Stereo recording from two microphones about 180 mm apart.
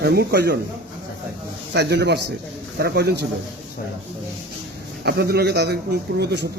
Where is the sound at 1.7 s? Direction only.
70° right (ahead or behind).